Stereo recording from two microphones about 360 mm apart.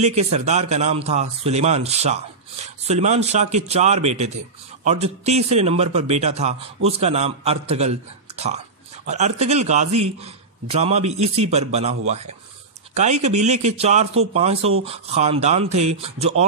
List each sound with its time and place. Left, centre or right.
0.0 s a man's voice: centre
8.3 s a sound: centre
9.0 s a man's voice: centre
12.9 s a man's voice: centre